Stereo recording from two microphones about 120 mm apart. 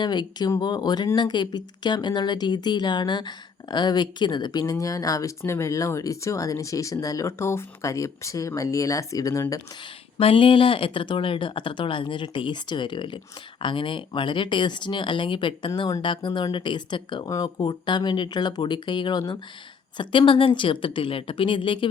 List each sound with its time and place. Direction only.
0.0 s speech: 40° left (ahead or behind)
10.2 s speech: 50° left (ahead or behind)